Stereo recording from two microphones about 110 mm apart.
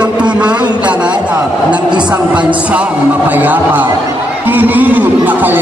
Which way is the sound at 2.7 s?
15° right (ahead or behind).